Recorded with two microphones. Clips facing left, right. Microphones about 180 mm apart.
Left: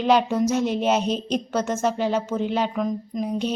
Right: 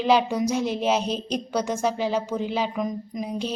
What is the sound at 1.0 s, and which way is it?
Speech, 35° right (ahead or behind).